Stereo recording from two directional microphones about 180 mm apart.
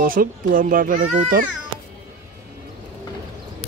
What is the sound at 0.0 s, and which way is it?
Speech, 50° right (ahead or behind).